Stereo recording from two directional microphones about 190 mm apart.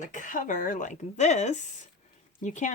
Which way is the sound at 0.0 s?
45° left (ahead or behind).